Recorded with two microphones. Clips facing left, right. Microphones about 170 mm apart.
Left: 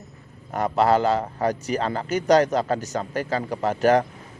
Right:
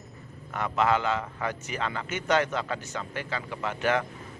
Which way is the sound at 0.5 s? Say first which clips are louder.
Left 6 dB; 40° left (ahead or behind).